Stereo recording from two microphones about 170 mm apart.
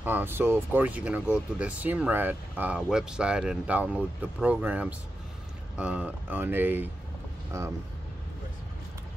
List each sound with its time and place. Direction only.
0.0 s speech: 10° right (ahead or behind)